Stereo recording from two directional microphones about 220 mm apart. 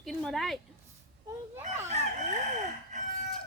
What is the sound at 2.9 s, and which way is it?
Chicken, 35° right (ahead or behind).